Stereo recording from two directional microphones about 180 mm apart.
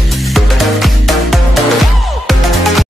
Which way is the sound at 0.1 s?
Centre (ahead or behind).